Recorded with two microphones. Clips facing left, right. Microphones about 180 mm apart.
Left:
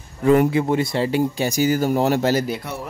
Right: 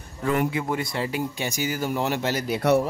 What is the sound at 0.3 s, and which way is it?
Speech, 35° left (ahead or behind).